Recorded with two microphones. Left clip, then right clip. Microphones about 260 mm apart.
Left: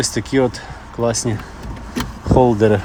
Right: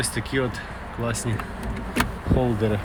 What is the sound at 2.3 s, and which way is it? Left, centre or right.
Speech, left.